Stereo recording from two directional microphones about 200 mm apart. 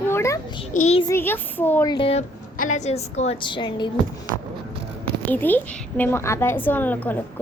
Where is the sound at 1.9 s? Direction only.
30° left (ahead or behind).